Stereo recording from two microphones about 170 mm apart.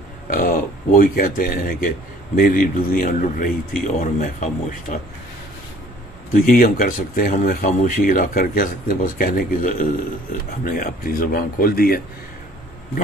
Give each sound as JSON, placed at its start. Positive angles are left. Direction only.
{"t": 0.3, "sound": "speech", "side_deg": 60}
{"t": 6.3, "sound": "speech", "side_deg": 55}